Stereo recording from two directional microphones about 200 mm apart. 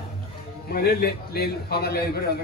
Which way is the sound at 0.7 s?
50° left (ahead or behind).